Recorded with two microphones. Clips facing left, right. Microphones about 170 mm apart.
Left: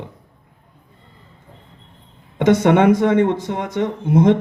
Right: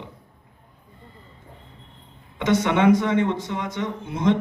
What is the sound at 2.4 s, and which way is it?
Speech, 55° left (ahead or behind).